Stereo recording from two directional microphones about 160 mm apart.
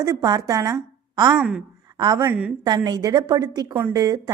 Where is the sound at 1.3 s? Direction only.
5° right (ahead or behind).